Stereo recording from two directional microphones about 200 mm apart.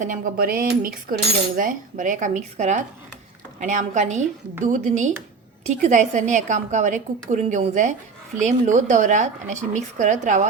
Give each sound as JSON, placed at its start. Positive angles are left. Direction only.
{"t": 0.0, "sound": "cutlery", "side_deg": -45}